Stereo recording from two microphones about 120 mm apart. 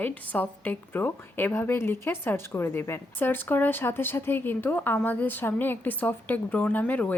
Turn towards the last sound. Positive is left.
turn(degrees=15)  # may be behind; listen again after turning